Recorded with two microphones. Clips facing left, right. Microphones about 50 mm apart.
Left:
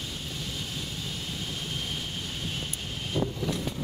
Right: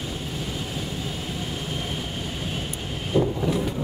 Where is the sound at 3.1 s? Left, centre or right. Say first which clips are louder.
Right 8 dB; centre.